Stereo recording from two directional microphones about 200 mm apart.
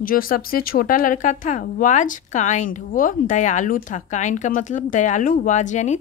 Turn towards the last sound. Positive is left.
turn(degrees=35)  # may be behind; listen again after turning